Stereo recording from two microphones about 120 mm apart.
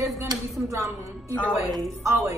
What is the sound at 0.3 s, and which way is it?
Speech, 25° right (ahead or behind).